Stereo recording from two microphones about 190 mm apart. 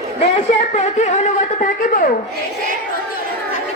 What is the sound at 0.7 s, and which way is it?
Speech, 35° left (ahead or behind).